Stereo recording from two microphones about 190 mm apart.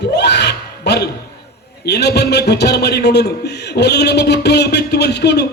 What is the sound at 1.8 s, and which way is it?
A man's voice, 60° left (ahead or behind).